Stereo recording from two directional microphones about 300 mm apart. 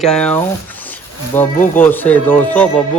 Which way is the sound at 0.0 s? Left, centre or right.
Centre.